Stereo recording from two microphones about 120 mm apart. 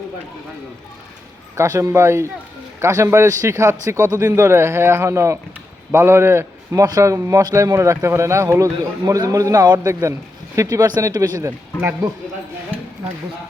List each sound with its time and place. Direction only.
1.5 s a man's voice: 25° right (ahead or behind)